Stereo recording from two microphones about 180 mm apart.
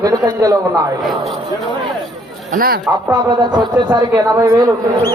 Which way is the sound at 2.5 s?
55° right (ahead or behind).